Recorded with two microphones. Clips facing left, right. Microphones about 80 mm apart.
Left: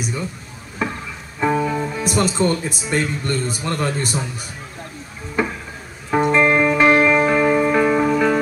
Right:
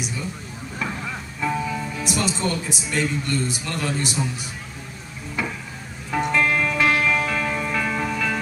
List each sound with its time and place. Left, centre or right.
1.5 s speech: left
5.4 s a sound: left
6.0 s music: left